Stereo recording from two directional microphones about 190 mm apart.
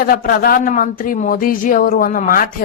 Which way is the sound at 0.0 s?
50° left (ahead or behind).